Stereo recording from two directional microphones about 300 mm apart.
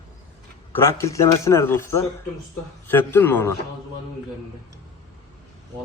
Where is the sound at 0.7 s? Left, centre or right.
Centre.